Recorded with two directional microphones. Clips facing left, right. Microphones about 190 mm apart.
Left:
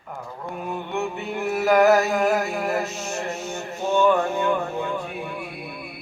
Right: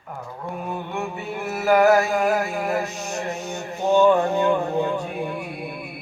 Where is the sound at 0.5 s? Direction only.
Centre (ahead or behind).